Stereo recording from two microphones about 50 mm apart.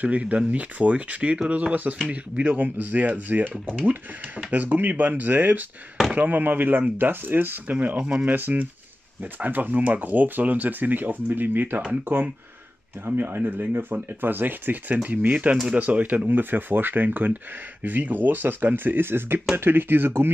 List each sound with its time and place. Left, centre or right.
0.0 s speech: right
8.0 s speech: right
8.3 s speech: right